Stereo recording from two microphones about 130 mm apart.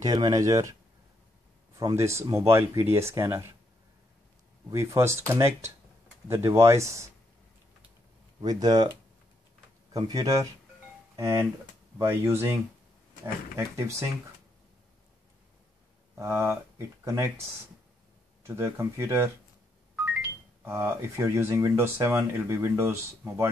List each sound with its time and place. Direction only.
0.0 s speech: 30° right (ahead or behind)
1.8 s speech: 25° right (ahead or behind)
4.6 s speech: 20° right (ahead or behind)
8.4 s speech: 30° right (ahead or behind)
9.9 s speech: 30° right (ahead or behind)
16.2 s speech: 20° right (ahead or behind)
18.4 s speech: 20° right (ahead or behind)
20.6 s speech: 20° right (ahead or behind)